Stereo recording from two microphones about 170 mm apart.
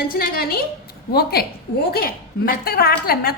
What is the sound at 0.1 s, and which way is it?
A woman's voice, 60° left (ahead or behind).